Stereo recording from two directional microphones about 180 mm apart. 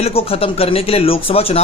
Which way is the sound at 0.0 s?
35° left (ahead or behind).